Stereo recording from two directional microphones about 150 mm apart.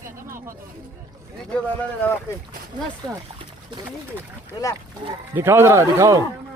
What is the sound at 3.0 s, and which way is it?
Speech, 30° right (ahead or behind).